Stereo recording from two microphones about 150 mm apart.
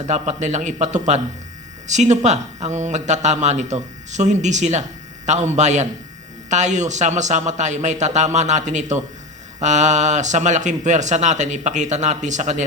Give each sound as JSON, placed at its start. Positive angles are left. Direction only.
{"t": 0.0, "sound": "speech", "side_deg": -50}